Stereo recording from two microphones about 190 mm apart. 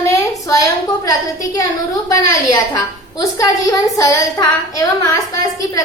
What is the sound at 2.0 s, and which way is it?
A woman's voice, 20° left (ahead or behind).